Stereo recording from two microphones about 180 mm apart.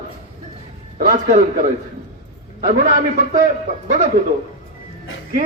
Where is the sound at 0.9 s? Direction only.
50° right (ahead or behind).